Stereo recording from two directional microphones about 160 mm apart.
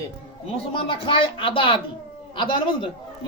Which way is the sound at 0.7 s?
35° left (ahead or behind).